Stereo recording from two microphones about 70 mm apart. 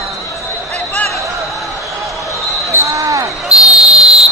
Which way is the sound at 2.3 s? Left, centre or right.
Right.